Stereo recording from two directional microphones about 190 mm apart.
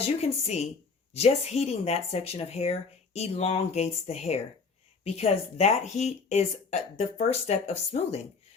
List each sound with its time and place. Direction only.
0.2 s speech: 35° left (ahead or behind)